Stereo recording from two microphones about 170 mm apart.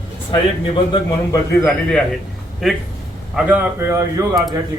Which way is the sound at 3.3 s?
10° right (ahead or behind).